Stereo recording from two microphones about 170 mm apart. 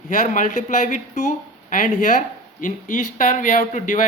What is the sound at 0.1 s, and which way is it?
Speech, 50° left (ahead or behind).